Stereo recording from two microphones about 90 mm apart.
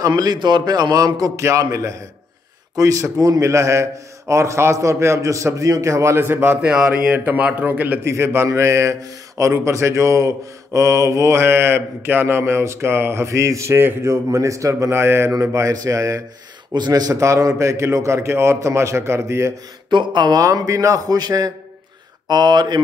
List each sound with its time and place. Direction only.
0.0 s a man's voice: 50° right (ahead or behind); by 8.1 s 20° right (ahead or behind)
8.1 s speech: 30° right (ahead or behind)
16.7 s speech: 50° right (ahead or behind); by 19.5 s 30° right (ahead or behind)
19.9 s a man's voice: 60° right (ahead or behind)